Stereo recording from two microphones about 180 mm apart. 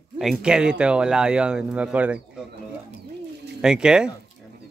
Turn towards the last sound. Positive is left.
turn(degrees=-5)  # may be behind; listen again after turning